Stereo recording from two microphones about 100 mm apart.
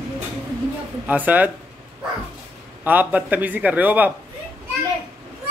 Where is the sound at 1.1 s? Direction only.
15° right (ahead or behind).